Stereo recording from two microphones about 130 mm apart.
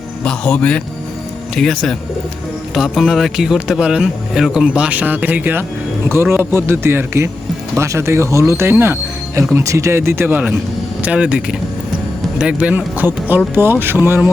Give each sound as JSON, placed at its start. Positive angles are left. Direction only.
{"t": 0.3, "sound": "speech", "side_deg": 10}